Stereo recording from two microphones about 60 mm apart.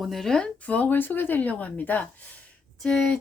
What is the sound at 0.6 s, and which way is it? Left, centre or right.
Speech, left.